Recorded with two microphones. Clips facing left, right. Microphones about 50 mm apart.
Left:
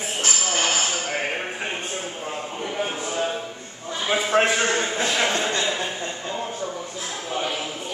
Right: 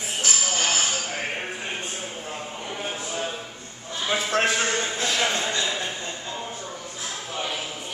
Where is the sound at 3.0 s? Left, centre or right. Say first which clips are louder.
Left 4 dB; centre.